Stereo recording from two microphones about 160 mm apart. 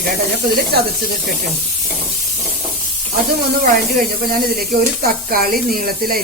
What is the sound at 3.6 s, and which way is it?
Speech, 65° right (ahead or behind).